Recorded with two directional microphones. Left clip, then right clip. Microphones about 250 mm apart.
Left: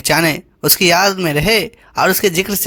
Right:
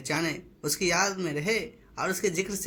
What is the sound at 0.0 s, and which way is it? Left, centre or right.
Speech, left.